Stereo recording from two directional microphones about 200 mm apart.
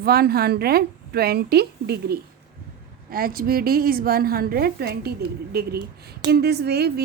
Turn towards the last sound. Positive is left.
turn(degrees=-55)  # may be behind; listen again after turning